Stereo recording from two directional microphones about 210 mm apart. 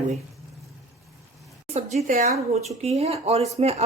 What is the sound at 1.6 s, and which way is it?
Speech, 30° right (ahead or behind).